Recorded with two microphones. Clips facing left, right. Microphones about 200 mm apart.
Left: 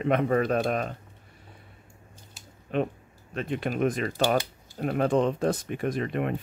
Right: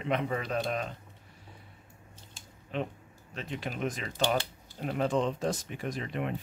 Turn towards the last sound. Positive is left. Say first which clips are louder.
# left 6 dB
turn(degrees=55)  # may be behind; listen again after turning